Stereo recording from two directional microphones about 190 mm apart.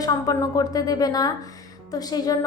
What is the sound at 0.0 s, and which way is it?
A woman's voice, 20° left (ahead or behind).